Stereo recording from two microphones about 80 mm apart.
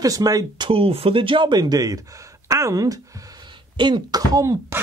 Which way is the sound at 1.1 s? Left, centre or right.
Right.